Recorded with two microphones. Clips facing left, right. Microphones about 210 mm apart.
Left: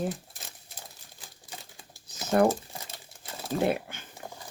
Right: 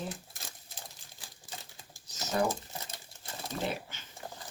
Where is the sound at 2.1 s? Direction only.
55° left (ahead or behind).